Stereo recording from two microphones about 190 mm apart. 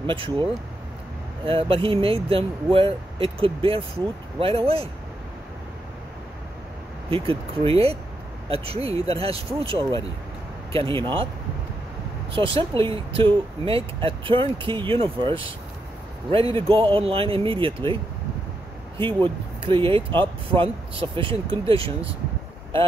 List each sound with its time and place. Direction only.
0.0 s speech: 25° right (ahead or behind)
7.1 s speech: 30° right (ahead or behind)
12.3 s speech: 30° right (ahead or behind)
18.9 s speech: 25° right (ahead or behind)